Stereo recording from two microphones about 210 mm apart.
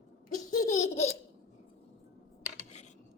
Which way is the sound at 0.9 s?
30° left (ahead or behind).